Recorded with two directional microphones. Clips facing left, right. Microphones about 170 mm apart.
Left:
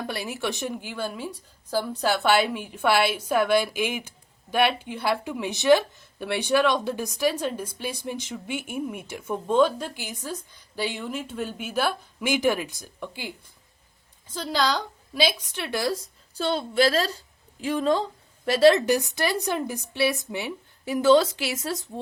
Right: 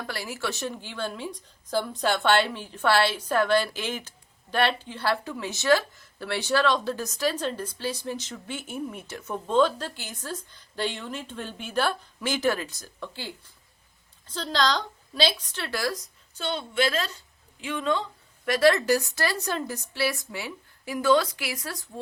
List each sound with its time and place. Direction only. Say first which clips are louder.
0.1 s speech: left 3 dB; 20° left (ahead or behind); by 18.0 s 35° left (ahead or behind)
18.4 s a woman's voice: left 3 dB; 25° left (ahead or behind)